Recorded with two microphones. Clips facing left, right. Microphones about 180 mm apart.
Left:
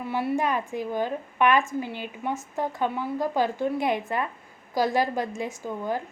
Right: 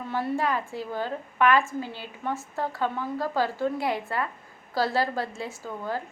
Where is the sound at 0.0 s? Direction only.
10° left (ahead or behind).